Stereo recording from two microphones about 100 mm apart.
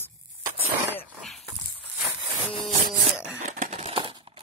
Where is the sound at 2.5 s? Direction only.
Centre (ahead or behind).